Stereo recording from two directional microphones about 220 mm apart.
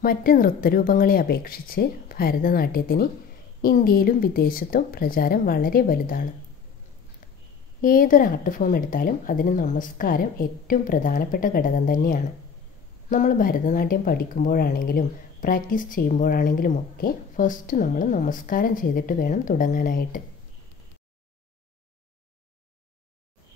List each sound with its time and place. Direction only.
0.0 s speech: 40° left (ahead or behind)
7.8 s speech: 40° left (ahead or behind)